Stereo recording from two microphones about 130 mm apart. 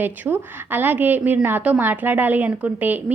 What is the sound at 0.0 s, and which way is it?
A woman's voice, 15° right (ahead or behind).